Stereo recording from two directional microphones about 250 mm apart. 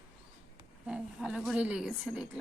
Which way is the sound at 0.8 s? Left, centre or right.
Centre.